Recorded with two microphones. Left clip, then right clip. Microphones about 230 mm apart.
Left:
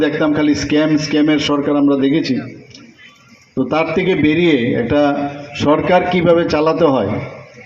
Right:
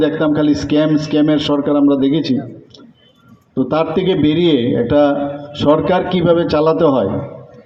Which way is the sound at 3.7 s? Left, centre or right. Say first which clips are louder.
Even; right.